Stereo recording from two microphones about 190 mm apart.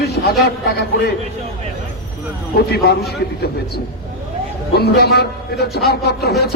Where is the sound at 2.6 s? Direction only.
55° left (ahead or behind).